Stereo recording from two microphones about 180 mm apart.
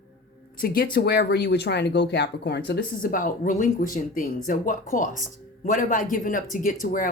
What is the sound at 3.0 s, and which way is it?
Speech, 50° left (ahead or behind).